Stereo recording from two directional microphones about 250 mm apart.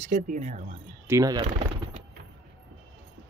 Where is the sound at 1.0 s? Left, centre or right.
Centre.